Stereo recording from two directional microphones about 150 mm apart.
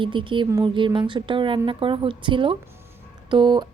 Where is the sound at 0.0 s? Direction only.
35° right (ahead or behind).